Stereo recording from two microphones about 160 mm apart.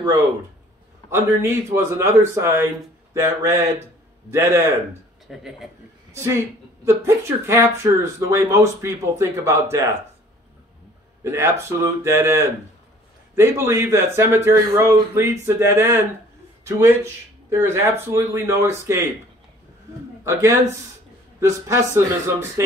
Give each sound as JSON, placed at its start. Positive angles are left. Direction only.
{"t": 1.1, "sound": "a woman's voice", "side_deg": -15}
{"t": 5.3, "sound": "a man's voice", "side_deg": 0}
{"t": 6.1, "sound": "a woman's voice", "side_deg": -15}
{"t": 11.2, "sound": "a woman's voice", "side_deg": -15}
{"t": 20.2, "sound": "a woman's voice", "side_deg": -15}